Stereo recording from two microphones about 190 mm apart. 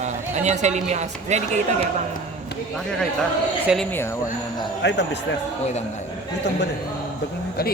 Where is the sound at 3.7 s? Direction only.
5° right (ahead or behind).